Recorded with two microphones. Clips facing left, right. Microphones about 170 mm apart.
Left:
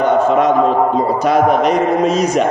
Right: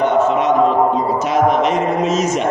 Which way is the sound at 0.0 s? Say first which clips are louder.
Left 2 dB; 40° left (ahead or behind).